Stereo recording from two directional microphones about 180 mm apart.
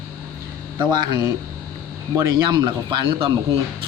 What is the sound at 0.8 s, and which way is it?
Speech, 25° right (ahead or behind).